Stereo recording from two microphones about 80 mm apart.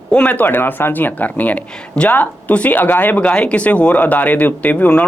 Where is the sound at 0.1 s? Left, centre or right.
Centre.